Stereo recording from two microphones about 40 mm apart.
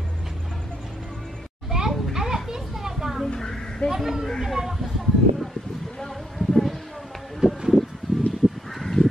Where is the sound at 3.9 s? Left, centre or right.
Centre.